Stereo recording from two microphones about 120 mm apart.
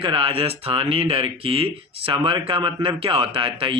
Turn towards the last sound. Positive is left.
turn(degrees=-50)  # may be behind; listen again after turning